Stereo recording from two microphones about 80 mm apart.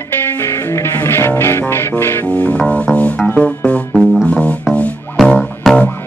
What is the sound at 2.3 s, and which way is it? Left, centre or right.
Music, centre.